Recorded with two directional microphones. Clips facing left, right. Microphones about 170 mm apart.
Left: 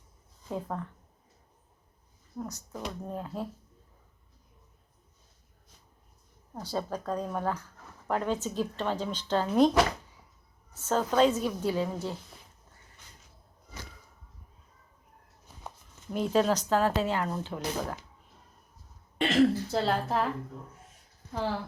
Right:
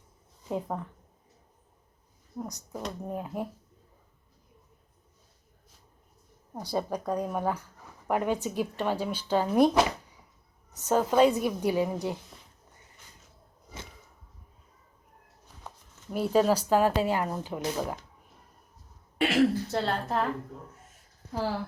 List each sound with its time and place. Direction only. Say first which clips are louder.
0.4 s a woman's voice: right 2 dB; 15° right (ahead or behind)
2.4 s speech: right 1 dB; 15° right (ahead or behind)
6.5 s speech: right 3 dB; 15° right (ahead or behind)
10.8 s speech: right 2 dB; 15° right (ahead or behind)
16.1 s speech: right 2 dB; 10° right (ahead or behind)
19.2 s speech: even; 5° right (ahead or behind)